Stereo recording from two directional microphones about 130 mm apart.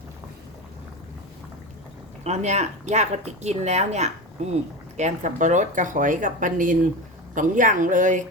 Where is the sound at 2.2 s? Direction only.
60° right (ahead or behind).